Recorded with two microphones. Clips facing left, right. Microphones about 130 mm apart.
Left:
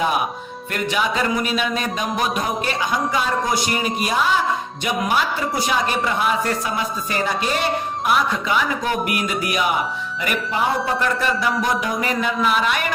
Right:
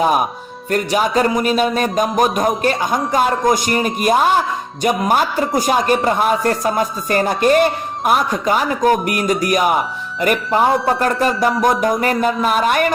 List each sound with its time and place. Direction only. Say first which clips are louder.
0.0 s speech: right 5 dB; 45° right (ahead or behind)